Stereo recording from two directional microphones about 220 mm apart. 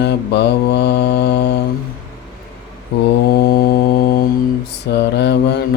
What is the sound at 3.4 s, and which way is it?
Music, 40° left (ahead or behind).